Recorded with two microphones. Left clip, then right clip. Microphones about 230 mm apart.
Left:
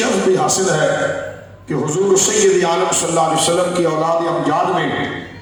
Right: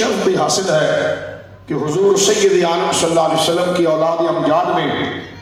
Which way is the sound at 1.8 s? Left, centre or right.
Left.